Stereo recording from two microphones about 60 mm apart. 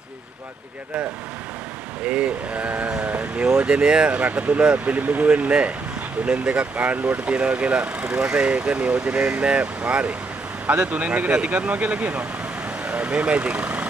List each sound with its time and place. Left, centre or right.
2.0 s speech: right